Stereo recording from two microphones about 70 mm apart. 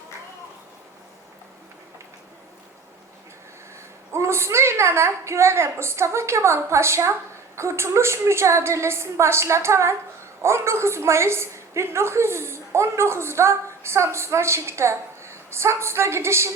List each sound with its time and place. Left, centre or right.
4.1 s a woman's voice: right